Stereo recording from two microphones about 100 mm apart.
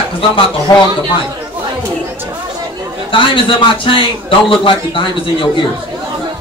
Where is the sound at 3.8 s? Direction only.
60° left (ahead or behind).